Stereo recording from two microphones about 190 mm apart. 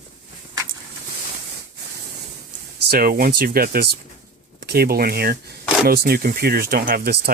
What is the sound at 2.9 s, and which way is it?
Speech, 50° right (ahead or behind).